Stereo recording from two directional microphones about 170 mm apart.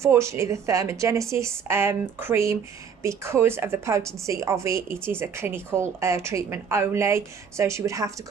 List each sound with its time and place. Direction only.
0.0 s a woman's voice: 15° right (ahead or behind)